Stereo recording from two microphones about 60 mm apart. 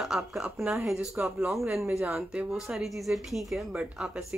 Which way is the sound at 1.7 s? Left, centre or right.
Right.